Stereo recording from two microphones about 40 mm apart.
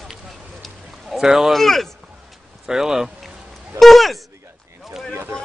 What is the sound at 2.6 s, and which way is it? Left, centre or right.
Speech, centre.